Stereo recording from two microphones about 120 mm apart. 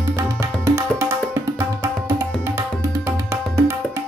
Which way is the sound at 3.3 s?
20° right (ahead or behind).